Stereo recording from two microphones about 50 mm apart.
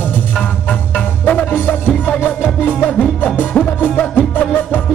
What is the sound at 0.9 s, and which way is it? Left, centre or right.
Music, left.